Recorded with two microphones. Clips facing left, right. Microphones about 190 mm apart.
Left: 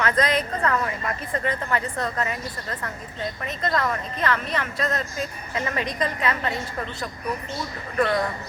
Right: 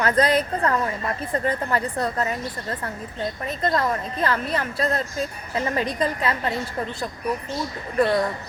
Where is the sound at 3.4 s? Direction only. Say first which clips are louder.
Right 2 dB; 35° right (ahead or behind).